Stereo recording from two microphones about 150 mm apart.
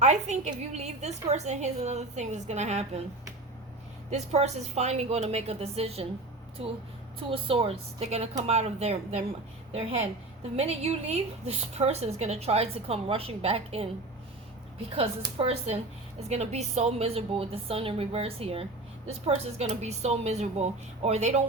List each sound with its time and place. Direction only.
0.0 s a woman's voice: 50° right (ahead or behind)
4.1 s a woman's voice: 45° right (ahead or behind)
10.6 s a woman's voice: 45° right (ahead or behind)
14.9 s a woman's voice: 40° right (ahead or behind)